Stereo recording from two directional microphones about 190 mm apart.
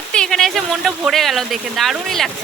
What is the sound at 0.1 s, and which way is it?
Speech, 5° left (ahead or behind).